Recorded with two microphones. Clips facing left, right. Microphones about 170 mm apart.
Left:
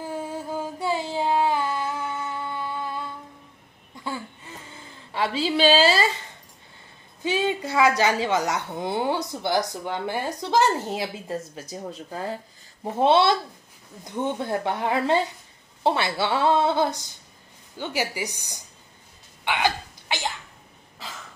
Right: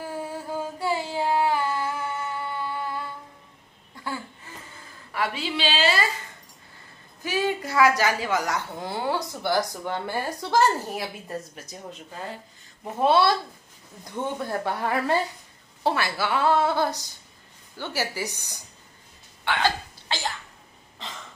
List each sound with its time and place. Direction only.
0.0 s a sound: 20° left (ahead or behind)
5.1 s a woman's voice: 30° left (ahead or behind)
7.2 s a woman's voice: 20° left (ahead or behind)
19.4 s hiccup: 15° left (ahead or behind)
21.0 s cough: 5° left (ahead or behind)